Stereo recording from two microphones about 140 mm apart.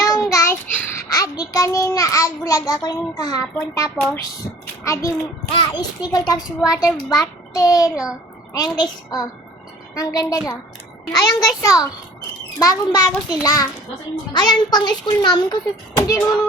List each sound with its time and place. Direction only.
0.0 s child singing: 20° left (ahead or behind)
4.0 s a child's voice: 15° left (ahead or behind)
5.5 s a child's voice: 35° left (ahead or behind)